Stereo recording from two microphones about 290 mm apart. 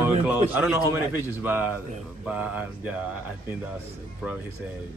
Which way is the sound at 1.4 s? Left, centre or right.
Centre.